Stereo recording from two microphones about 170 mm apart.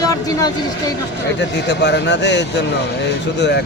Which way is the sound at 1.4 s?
90° left.